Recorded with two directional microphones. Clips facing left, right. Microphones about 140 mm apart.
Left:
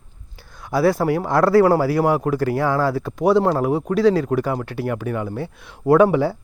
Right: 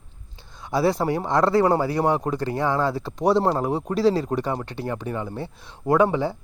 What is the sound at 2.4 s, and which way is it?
Speech, 20° right (ahead or behind).